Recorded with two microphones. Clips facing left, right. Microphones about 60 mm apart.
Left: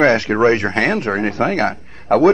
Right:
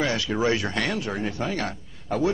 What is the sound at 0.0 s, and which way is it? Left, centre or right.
A man's voice, left.